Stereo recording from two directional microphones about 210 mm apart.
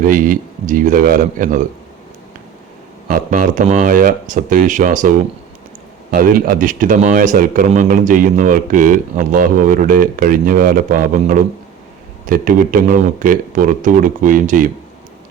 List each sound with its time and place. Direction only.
0.0 s a man's voice: 40° right (ahead or behind)
3.1 s a man's voice: 40° right (ahead or behind)